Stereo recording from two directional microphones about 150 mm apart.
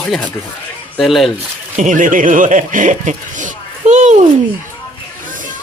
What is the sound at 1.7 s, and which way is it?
Chuckle, 60° right (ahead or behind).